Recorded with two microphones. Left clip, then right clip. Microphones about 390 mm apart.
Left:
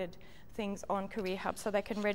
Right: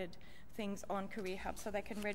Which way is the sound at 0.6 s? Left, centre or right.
Left.